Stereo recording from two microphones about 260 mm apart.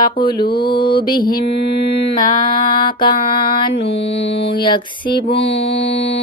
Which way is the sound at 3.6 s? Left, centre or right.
Left.